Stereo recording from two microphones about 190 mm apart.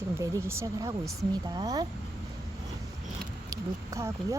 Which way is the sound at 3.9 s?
15° right (ahead or behind).